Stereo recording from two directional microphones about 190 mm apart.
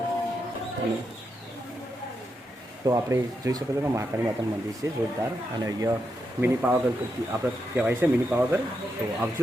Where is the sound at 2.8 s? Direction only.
15° right (ahead or behind).